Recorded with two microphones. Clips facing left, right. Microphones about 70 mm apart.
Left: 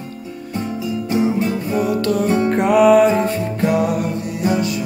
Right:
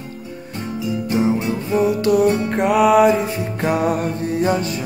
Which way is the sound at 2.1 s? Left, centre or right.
Centre.